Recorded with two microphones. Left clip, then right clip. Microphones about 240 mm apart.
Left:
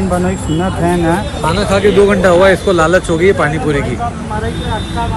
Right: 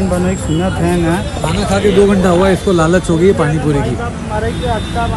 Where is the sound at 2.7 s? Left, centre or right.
Right.